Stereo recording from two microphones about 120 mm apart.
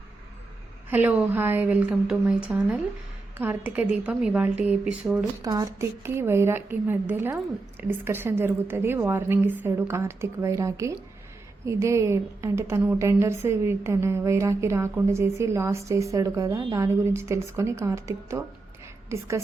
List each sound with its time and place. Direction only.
0.9 s a woman's voice: 15° right (ahead or behind)
5.4 s a woman's voice: 30° right (ahead or behind)